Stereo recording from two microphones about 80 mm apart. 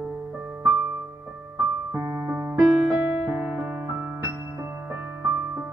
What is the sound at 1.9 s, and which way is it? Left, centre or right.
Music, right.